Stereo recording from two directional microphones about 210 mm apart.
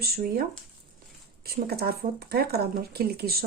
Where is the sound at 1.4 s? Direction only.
45° right (ahead or behind).